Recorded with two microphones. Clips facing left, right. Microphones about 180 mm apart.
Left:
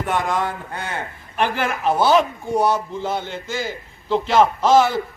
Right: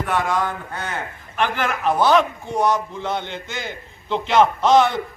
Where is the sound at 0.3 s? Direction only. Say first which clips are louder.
Even; 30° left (ahead or behind).